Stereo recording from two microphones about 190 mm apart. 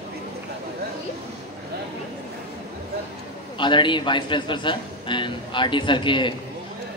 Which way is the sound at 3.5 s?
25° left (ahead or behind).